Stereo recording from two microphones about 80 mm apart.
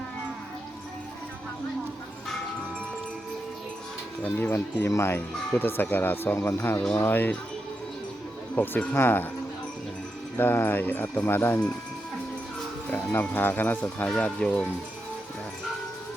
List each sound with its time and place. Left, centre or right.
4.2 s speech: left
8.5 s speech: left
10.3 s speech: left
12.9 s speech: left; by 14.7 s centre